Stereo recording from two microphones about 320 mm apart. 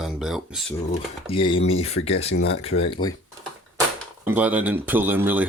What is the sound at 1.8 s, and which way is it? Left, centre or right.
Speech, centre.